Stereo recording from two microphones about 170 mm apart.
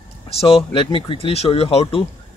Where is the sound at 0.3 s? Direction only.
35° left (ahead or behind).